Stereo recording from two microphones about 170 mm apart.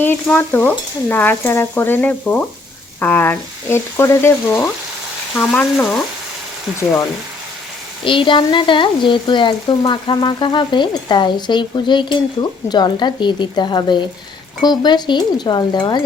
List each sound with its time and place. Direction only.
0.0 s frying: 10° left (ahead or behind)
8.0 s speech: 30° left (ahead or behind)